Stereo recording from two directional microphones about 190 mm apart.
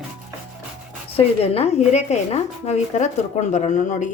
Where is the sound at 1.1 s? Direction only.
30° left (ahead or behind).